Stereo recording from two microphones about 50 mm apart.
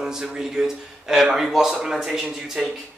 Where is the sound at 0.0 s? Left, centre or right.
Centre.